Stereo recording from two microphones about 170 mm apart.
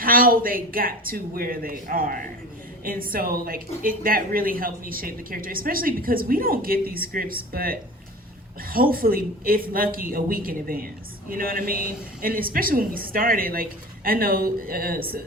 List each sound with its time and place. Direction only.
0.0 s speech: 55° right (ahead or behind)